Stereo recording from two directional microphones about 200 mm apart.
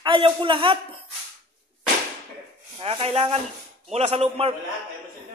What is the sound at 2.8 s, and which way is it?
A man's voice, 30° right (ahead or behind).